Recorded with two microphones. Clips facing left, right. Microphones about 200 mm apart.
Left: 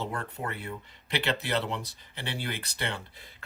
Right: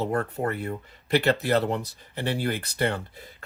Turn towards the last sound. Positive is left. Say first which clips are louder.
# right 7 dB
turn(degrees=-45)  # may be behind; listen again after turning